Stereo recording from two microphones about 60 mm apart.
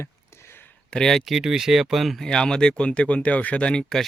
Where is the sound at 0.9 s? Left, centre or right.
Centre.